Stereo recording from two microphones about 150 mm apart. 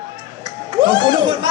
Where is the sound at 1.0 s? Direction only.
30° right (ahead or behind).